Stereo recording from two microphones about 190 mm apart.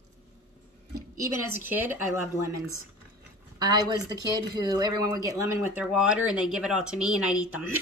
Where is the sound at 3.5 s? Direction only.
20° right (ahead or behind).